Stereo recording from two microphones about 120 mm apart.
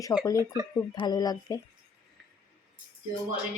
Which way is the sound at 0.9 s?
35° left (ahead or behind).